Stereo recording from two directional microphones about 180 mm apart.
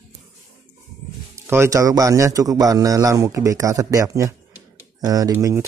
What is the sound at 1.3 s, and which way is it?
A man's voice, 15° right (ahead or behind).